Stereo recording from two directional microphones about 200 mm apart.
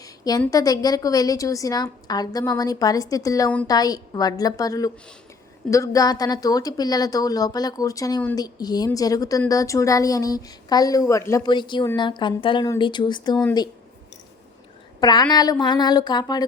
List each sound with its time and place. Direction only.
0.0 s a sound: 20° left (ahead or behind)
0.5 s a woman's voice: 20° left (ahead or behind)
15.0 s a woman's voice: 20° left (ahead or behind)